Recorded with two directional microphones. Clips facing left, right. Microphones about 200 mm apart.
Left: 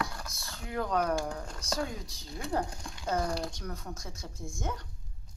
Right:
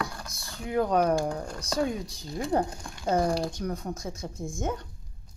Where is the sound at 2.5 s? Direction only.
20° right (ahead or behind).